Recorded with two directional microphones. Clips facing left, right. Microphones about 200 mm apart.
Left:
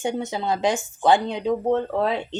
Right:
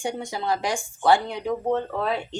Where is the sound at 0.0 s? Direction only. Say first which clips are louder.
Left 3 dB; 20° left (ahead or behind).